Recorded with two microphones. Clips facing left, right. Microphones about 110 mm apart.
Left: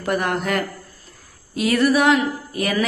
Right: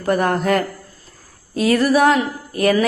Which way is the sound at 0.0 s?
35° right (ahead or behind).